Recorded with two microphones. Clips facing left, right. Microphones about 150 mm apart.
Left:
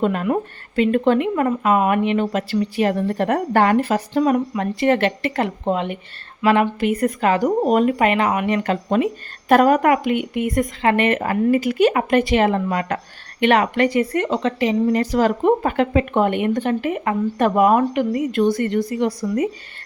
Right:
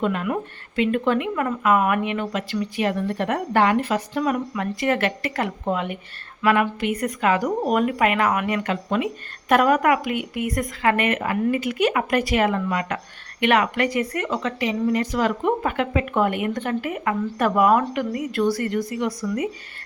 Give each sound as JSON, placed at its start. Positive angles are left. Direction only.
{"t": 0.0, "sound": "a woman's voice", "side_deg": 35}